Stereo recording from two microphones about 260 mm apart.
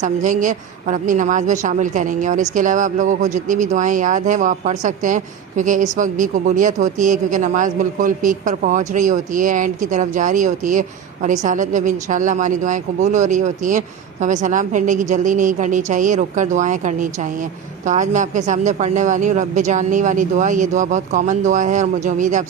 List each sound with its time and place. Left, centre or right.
0.0 s a woman's voice: right